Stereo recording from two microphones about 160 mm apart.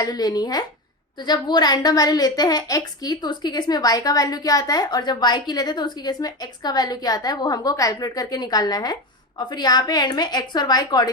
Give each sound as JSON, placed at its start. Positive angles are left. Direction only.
{"t": 0.0, "sound": "a woman's voice", "side_deg": 25}